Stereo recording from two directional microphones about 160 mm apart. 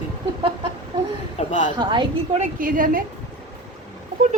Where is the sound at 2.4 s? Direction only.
60° right (ahead or behind).